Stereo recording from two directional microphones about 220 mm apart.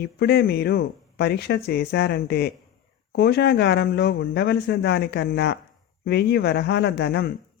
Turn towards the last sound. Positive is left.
turn(degrees=50)  # may be behind; listen again after turning